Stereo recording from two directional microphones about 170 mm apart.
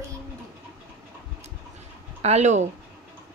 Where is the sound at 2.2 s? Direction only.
40° right (ahead or behind).